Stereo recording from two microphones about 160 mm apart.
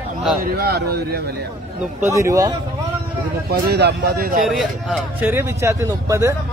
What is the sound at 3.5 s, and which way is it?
A man's voice, 90° right.